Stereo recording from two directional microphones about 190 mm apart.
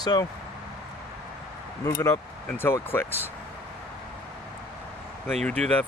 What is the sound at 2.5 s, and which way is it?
Speech, 10° left (ahead or behind).